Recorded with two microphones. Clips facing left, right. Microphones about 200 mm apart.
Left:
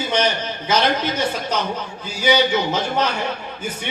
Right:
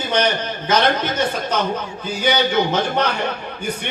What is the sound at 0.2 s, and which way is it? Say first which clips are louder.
A man's voice: right 1 dB; 55° right (ahead or behind).